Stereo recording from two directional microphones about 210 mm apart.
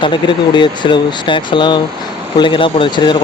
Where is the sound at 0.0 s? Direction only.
20° left (ahead or behind).